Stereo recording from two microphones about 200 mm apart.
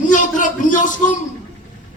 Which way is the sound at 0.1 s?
40° left (ahead or behind).